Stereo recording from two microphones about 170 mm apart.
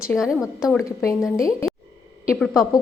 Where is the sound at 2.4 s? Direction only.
5° left (ahead or behind).